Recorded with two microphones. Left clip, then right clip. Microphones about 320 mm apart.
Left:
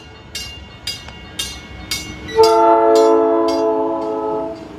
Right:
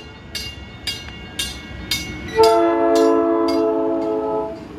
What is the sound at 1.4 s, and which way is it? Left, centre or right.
Train, centre.